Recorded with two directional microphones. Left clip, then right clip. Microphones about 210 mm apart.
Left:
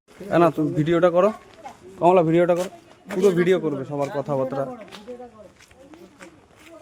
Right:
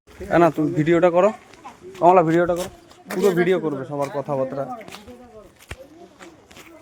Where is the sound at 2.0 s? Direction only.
30° left (ahead or behind).